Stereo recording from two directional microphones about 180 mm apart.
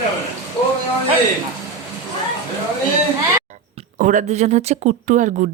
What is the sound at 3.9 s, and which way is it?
Speech, 45° right (ahead or behind).